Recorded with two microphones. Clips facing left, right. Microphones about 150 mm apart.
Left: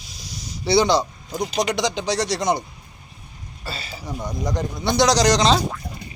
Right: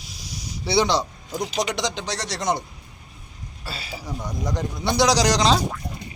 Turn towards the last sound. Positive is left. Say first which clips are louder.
# left 2 dB
turn(degrees=-5)  # may be behind; listen again after turning